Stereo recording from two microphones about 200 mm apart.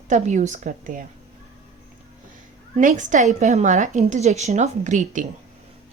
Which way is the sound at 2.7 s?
40° right (ahead or behind).